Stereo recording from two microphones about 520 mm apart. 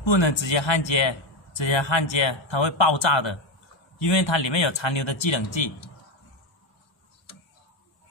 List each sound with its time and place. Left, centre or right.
0.0 s a man's voice: left